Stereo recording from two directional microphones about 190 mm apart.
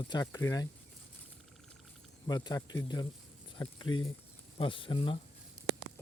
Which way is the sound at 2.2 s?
20° left (ahead or behind).